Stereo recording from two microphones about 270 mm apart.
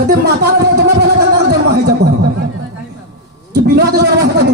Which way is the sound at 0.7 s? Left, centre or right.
Right.